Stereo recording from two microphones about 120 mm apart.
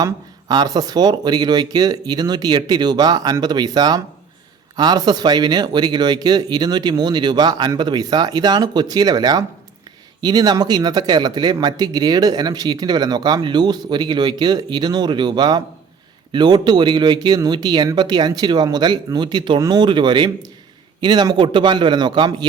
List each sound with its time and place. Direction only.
0.0 s speech: 35° right (ahead or behind)